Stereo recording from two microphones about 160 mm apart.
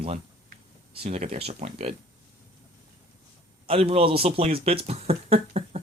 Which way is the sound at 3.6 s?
35° right (ahead or behind).